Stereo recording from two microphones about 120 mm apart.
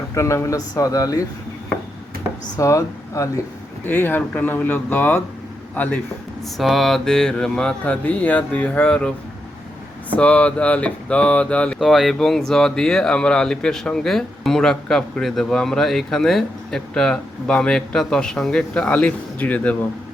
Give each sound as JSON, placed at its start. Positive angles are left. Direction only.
{"t": 0.1, "sound": "speech", "side_deg": 25}
{"t": 2.6, "sound": "speech", "side_deg": 25}
{"t": 3.8, "sound": "mantra", "side_deg": 15}
{"t": 5.7, "sound": "a man's voice", "side_deg": 15}
{"t": 6.6, "sound": "mantra", "side_deg": 0}
{"t": 11.8, "sound": "speech", "side_deg": 0}